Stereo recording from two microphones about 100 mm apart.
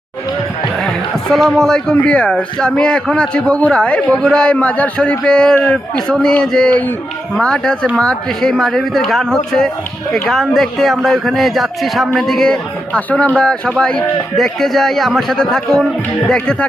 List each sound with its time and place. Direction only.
1.3 s speech: 5° left (ahead or behind)